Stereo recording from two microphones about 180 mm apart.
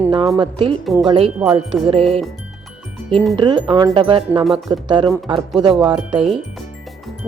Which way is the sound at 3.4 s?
25° right (ahead or behind).